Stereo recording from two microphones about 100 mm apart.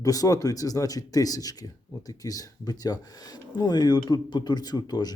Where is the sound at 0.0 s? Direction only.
35° left (ahead or behind).